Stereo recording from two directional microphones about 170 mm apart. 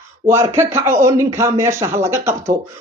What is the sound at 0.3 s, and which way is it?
A woman's voice, 15° right (ahead or behind).